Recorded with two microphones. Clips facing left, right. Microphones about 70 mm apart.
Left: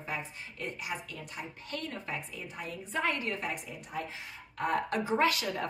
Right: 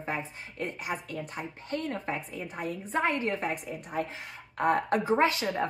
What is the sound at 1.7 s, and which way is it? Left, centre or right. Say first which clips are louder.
Speech: right 6 dB; right.